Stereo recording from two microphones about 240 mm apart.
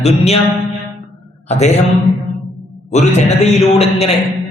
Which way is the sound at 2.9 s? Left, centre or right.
Left.